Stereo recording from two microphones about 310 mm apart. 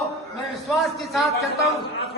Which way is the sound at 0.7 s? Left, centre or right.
Centre.